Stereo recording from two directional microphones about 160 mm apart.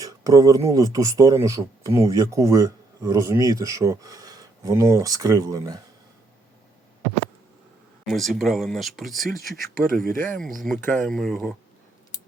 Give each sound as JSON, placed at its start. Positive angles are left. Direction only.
{"t": 0.0, "sound": "speech", "side_deg": -20}
{"t": 8.0, "sound": "speech", "side_deg": 0}
{"t": 9.7, "sound": "speech", "side_deg": -60}
{"t": 10.3, "sound": "speech", "side_deg": 0}